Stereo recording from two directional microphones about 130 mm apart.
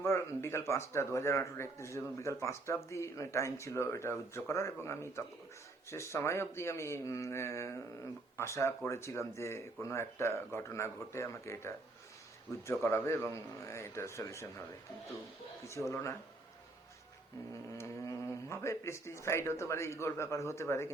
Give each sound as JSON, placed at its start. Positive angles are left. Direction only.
{"t": 0.0, "sound": "speech", "side_deg": 20}
{"t": 12.8, "sound": "speech", "side_deg": 20}
{"t": 15.6, "sound": "speech", "side_deg": 20}
{"t": 17.7, "sound": "speech", "side_deg": 20}